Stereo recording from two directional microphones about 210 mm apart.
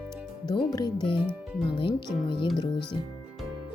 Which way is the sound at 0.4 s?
20° left (ahead or behind).